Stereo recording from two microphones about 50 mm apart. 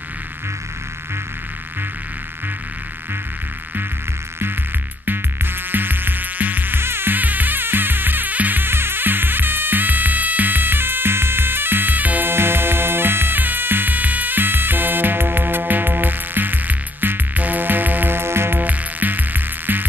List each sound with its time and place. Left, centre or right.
5.0 s music: right
12.3 s music: right
18.6 s music: right